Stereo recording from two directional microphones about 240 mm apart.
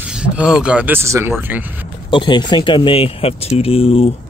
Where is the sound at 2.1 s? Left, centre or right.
Centre.